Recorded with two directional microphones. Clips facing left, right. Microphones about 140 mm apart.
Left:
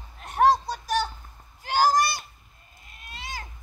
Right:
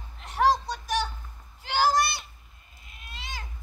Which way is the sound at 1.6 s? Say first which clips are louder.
Left 2 dB; 40° left (ahead or behind).